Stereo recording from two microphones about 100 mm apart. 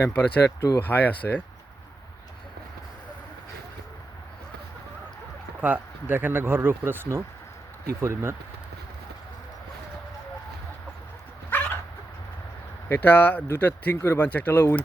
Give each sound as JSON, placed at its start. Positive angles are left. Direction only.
{"t": 0.0, "sound": "speech", "side_deg": 25}
{"t": 5.5, "sound": "speech", "side_deg": -15}
{"t": 11.5, "sound": "dog", "side_deg": 15}
{"t": 12.9, "sound": "speech", "side_deg": 20}